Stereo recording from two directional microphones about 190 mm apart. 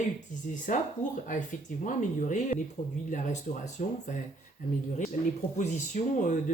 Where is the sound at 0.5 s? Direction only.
40° left (ahead or behind).